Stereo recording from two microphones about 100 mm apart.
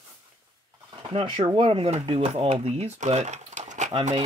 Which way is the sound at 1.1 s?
60° right (ahead or behind).